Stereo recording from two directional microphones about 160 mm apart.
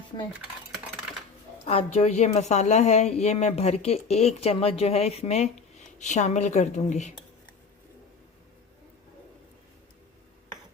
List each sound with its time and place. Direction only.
1.6 s a woman's voice: 40° left (ahead or behind)